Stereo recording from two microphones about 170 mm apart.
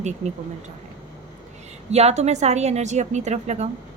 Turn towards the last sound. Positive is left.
turn(degrees=-40)  # may be behind; listen again after turning